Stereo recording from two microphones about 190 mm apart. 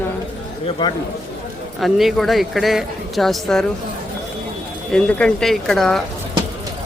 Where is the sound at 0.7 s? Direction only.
25° left (ahead or behind).